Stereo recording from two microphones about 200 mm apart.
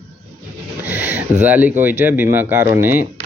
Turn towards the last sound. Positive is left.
turn(degrees=-10)  # may be behind; listen again after turning